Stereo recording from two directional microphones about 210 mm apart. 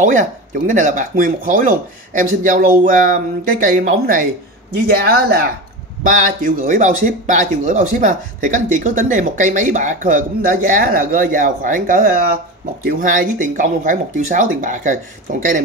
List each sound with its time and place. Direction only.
0.0 s speech: 40° right (ahead or behind)
3.6 s speech: 40° right (ahead or behind)